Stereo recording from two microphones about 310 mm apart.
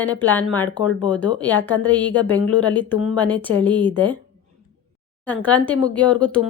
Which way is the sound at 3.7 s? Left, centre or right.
Centre.